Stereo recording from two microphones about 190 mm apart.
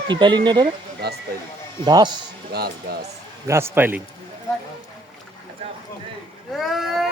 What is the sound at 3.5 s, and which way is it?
Speech, 15° right (ahead or behind).